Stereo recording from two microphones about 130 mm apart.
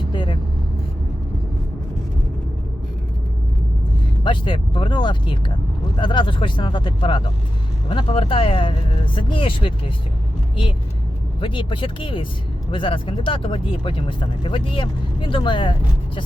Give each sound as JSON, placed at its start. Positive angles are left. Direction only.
{"t": 0.1, "sound": "vehicle", "side_deg": 40}
{"t": 4.2, "sound": "speech", "side_deg": 40}
{"t": 11.3, "sound": "speech", "side_deg": 40}